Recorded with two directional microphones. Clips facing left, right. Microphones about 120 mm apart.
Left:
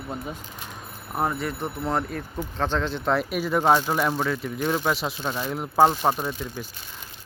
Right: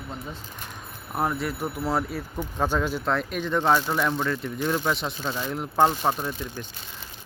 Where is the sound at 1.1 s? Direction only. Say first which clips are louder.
Even; centre (ahead or behind).